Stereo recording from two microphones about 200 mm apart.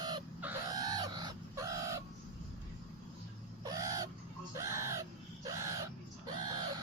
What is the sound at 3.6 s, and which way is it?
Fowl, 15° right (ahead or behind).